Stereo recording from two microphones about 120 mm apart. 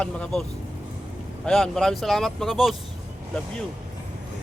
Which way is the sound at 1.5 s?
5° left (ahead or behind).